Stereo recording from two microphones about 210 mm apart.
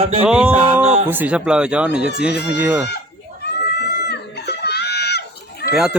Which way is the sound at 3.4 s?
50° left (ahead or behind).